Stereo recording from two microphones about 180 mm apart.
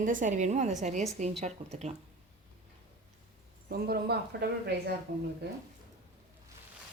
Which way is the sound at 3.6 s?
60° right (ahead or behind).